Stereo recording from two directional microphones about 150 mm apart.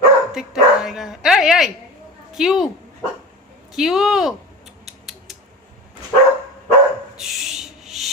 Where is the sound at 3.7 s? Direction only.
5° right (ahead or behind).